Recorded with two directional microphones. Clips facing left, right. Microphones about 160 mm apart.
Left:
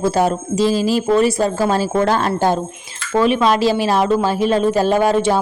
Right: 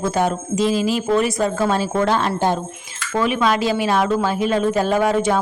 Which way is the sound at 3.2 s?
30° left (ahead or behind).